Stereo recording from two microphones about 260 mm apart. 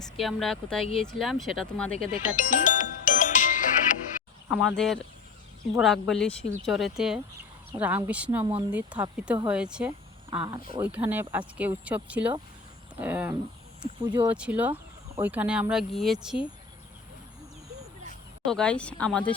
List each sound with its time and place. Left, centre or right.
0.0 s speech: centre
2.3 s music: left
4.4 s speech: centre
18.4 s speech: centre